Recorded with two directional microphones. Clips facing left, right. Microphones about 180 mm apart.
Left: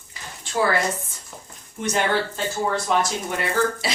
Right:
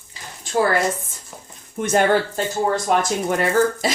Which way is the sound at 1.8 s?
50° right (ahead or behind).